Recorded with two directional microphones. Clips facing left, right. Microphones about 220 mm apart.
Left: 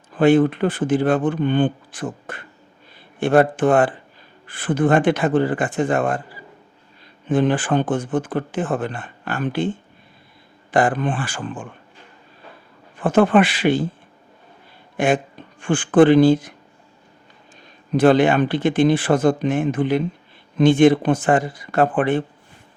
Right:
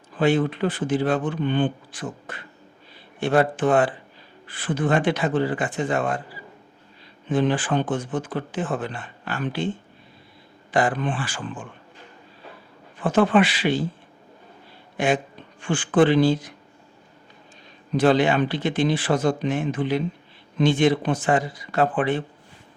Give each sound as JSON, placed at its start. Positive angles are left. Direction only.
{"t": 0.2, "sound": "speech", "side_deg": 50}
{"t": 7.3, "sound": "speech", "side_deg": 50}
{"t": 10.7, "sound": "speech", "side_deg": 50}
{"t": 13.0, "sound": "speech", "side_deg": 50}
{"t": 14.9, "sound": "speech", "side_deg": 50}
{"t": 17.9, "sound": "speech", "side_deg": 50}